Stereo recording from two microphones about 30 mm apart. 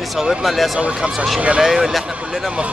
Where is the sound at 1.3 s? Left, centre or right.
Right.